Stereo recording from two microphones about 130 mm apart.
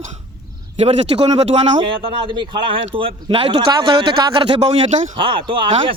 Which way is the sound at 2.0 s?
40° right (ahead or behind).